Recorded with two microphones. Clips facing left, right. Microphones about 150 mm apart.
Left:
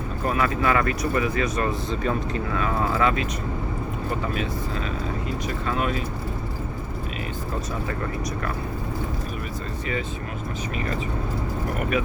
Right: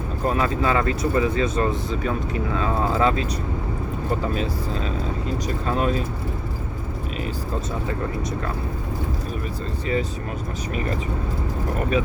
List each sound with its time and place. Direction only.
0.3 s speech: 25° right (ahead or behind)
1.9 s speech: 5° right (ahead or behind)
2.5 s speech: 25° right (ahead or behind)
4.4 s speech: 35° right (ahead or behind)
11.8 s speech: 30° right (ahead or behind)